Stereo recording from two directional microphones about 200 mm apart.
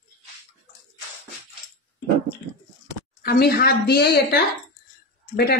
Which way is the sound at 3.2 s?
50° left (ahead or behind).